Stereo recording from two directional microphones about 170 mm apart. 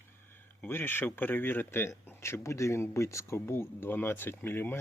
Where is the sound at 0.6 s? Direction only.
15° left (ahead or behind).